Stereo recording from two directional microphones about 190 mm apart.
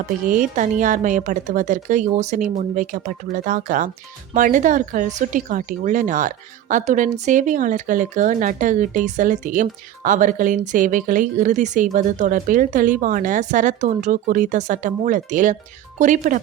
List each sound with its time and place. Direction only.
0.3 s speech: 40° right (ahead or behind)